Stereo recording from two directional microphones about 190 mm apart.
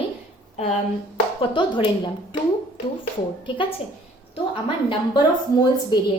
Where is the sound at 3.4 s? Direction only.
25° left (ahead or behind).